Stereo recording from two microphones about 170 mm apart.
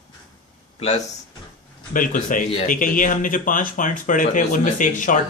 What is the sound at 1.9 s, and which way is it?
Speech, 50° left (ahead or behind).